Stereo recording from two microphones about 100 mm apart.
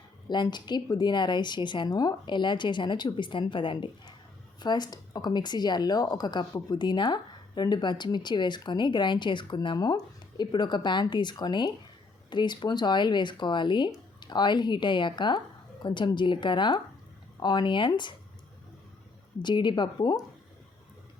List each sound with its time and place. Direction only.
0.3 s speech: 45° left (ahead or behind)
4.6 s speech: 45° left (ahead or behind)
9.7 s speech: 40° left (ahead or behind)
19.4 s speech: 50° left (ahead or behind)